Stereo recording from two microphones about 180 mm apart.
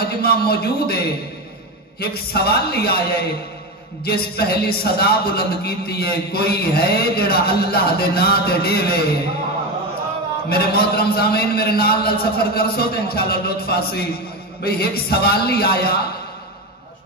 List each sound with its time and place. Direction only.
0.0 s a man's voice: 60° left (ahead or behind)
10.5 s a man's voice: 60° left (ahead or behind)